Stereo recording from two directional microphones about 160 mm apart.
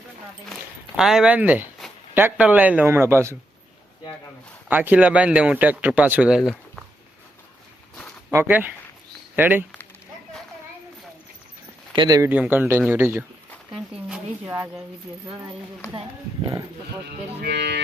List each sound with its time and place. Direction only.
0.5 s speech: centre (ahead or behind)
4.7 s speech: 10° right (ahead or behind)
8.3 s speech: 15° right (ahead or behind)
11.9 s speech: 25° right (ahead or behind)
12.3 s speech: 10° right (ahead or behind)
17.4 s speech: 90° right